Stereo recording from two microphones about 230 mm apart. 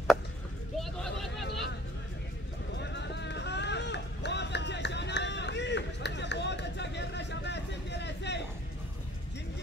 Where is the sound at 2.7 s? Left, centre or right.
Left.